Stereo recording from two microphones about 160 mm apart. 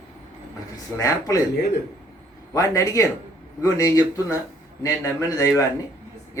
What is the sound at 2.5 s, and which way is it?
A man's voice, 20° left (ahead or behind).